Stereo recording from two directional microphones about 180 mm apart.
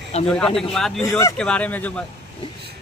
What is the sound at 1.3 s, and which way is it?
Speech, 5° left (ahead or behind).